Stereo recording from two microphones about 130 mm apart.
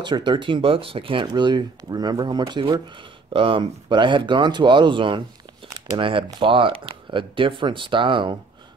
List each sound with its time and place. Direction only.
0.0 s speech: 35° right (ahead or behind)